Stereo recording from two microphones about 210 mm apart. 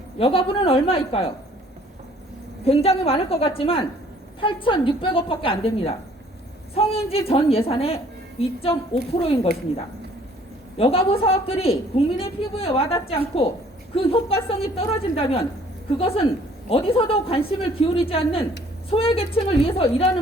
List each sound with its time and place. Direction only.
0.2 s a woman's voice: 25° left (ahead or behind)
2.6 s a woman's voice: 30° left (ahead or behind)
10.8 s a woman's voice: 25° left (ahead or behind)